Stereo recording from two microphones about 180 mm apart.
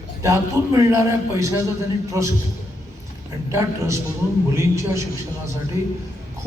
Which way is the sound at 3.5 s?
15° right (ahead or behind).